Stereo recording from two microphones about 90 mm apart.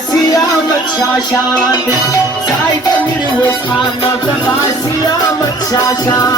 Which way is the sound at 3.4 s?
50° left (ahead or behind).